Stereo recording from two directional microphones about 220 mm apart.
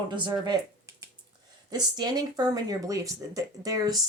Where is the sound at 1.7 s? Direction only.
20° right (ahead or behind).